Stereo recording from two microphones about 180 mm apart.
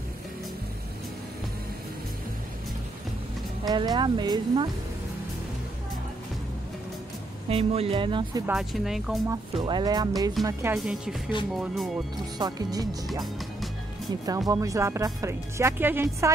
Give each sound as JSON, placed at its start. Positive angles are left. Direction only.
{"t": 3.6, "sound": "speech", "side_deg": -20}
{"t": 7.4, "sound": "speech", "side_deg": -35}
{"t": 8.5, "sound": "speech", "side_deg": 0}
{"t": 9.3, "sound": "speech", "side_deg": -25}
{"t": 10.8, "sound": "speech", "side_deg": -5}
{"t": 12.4, "sound": "speech", "side_deg": -20}
{"t": 14.5, "sound": "speech", "side_deg": -20}